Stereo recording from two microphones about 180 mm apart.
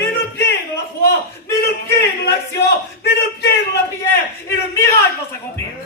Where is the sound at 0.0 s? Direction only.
65° left (ahead or behind).